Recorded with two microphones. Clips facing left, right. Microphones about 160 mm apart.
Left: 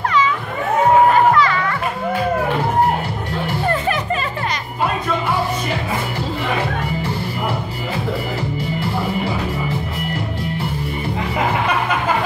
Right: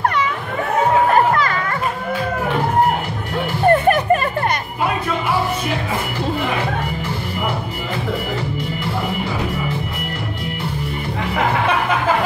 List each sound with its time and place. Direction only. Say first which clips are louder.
1.1 s music: left 1 dB; 45° right (ahead or behind)
3.6 s music: right 9 dB; 55° right (ahead or behind)